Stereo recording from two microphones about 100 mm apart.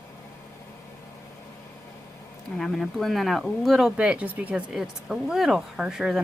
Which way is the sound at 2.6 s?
Centre (ahead or behind).